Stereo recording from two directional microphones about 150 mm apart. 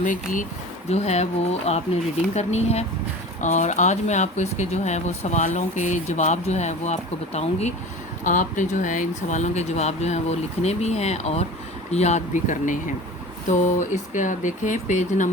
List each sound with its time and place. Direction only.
0.0 s speech: 60° left (ahead or behind)
0.9 s speech: 45° left (ahead or behind)